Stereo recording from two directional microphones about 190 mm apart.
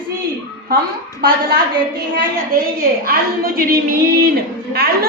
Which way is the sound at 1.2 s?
60° right (ahead or behind).